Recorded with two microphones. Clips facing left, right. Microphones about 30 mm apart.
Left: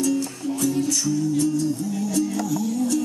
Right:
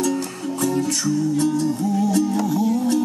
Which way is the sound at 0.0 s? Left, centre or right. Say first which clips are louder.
Even; right.